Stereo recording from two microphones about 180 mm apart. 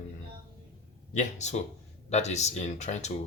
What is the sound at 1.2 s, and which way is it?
Speech, 40° left (ahead or behind).